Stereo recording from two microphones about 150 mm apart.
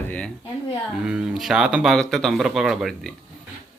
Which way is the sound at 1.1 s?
5° right (ahead or behind).